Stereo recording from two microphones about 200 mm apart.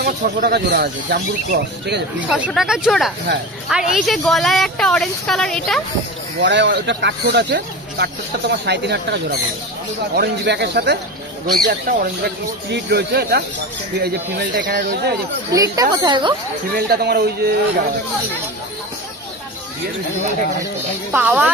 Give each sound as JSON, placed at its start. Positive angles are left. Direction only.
{"t": 0.0, "sound": "speech", "side_deg": -55}
{"t": 2.1, "sound": "a woman's voice", "side_deg": -5}
{"t": 6.4, "sound": "speech", "side_deg": -60}
{"t": 11.5, "sound": "speech", "side_deg": -45}
{"t": 15.5, "sound": "speech", "side_deg": -15}
{"t": 16.7, "sound": "speech", "side_deg": -50}
{"t": 21.1, "sound": "speech", "side_deg": -5}